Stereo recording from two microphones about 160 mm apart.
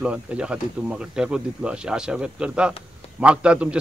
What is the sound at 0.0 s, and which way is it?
A man's voice, 5° right (ahead or behind).